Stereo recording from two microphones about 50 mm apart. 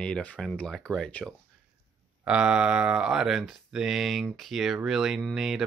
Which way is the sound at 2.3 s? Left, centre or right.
Right.